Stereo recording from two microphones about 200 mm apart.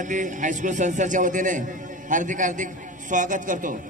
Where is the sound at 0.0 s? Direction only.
40° right (ahead or behind).